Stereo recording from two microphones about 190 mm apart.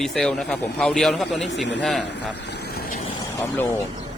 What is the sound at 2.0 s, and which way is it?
Speech, 65° left (ahead or behind).